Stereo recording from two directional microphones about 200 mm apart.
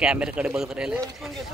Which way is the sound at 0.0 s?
5° right (ahead or behind).